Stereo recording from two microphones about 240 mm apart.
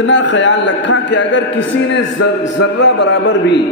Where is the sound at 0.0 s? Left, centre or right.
Left.